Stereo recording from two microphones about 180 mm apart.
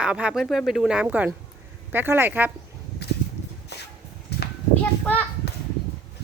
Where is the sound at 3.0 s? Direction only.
65° left (ahead or behind).